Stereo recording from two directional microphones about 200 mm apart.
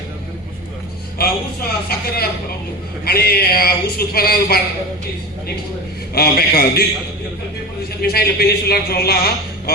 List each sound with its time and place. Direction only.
1.9 s a man's voice: 50° left (ahead or behind)
6.1 s a man's voice: 50° left (ahead or behind)
8.0 s a man's voice: 50° left (ahead or behind)